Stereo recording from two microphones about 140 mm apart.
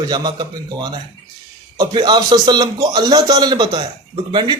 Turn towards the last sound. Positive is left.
turn(degrees=-35)  # may be behind; listen again after turning